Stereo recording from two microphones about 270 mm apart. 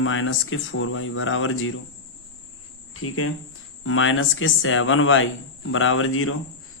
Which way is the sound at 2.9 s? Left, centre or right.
Left.